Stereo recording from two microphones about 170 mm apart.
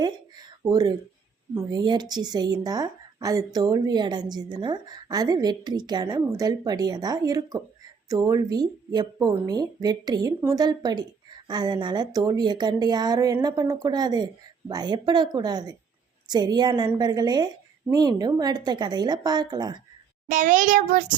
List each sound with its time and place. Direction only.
0.7 s speech: 20° right (ahead or behind)
20.2 s a child's voice: 45° right (ahead or behind)